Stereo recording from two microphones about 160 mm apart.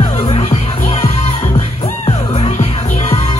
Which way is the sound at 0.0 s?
40° left (ahead or behind).